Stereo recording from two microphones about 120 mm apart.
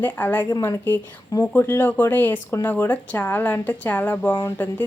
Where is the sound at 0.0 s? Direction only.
15° left (ahead or behind).